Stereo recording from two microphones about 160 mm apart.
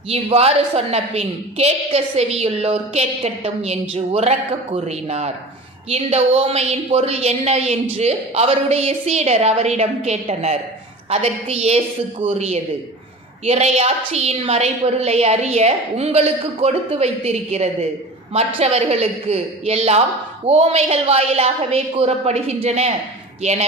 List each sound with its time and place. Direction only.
0.1 s a woman's voice: 40° right (ahead or behind)